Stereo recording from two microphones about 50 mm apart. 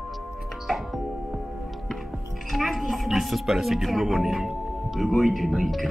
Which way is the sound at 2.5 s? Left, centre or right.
Centre.